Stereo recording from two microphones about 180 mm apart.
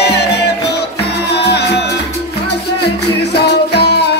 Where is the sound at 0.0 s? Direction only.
70° left (ahead or behind).